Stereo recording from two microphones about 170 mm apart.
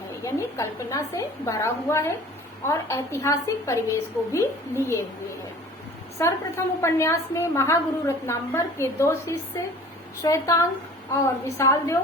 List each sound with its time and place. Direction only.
0.3 s a woman's voice: 15° left (ahead or behind)
6.2 s a woman's voice: 15° left (ahead or behind)